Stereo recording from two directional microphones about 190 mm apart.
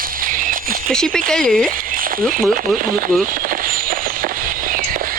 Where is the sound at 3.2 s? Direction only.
45° right (ahead or behind).